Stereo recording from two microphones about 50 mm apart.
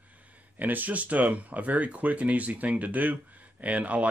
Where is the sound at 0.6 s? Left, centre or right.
Right.